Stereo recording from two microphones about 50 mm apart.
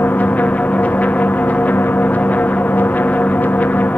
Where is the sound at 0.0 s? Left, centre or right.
Left.